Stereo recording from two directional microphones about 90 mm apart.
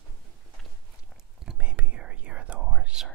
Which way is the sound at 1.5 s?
15° right (ahead or behind).